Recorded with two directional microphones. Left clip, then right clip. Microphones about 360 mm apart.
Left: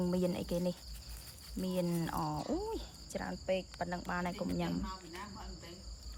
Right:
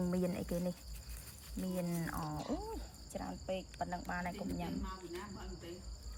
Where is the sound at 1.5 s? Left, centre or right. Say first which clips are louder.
Left 5 dB; centre.